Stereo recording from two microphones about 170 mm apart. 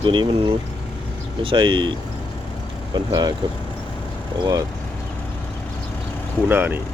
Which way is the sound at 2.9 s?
25° right (ahead or behind).